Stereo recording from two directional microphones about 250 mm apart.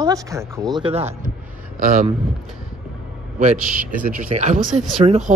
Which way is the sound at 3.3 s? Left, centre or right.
Right.